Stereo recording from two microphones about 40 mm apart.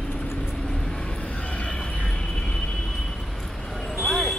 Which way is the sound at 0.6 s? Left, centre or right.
Centre.